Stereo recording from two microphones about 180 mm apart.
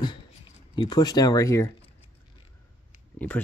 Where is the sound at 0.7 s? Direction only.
25° left (ahead or behind).